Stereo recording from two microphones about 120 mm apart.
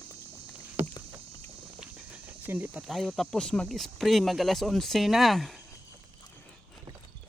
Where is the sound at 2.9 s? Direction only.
Centre (ahead or behind).